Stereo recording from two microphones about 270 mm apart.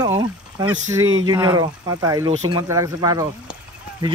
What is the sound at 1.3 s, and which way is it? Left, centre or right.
Speech, centre.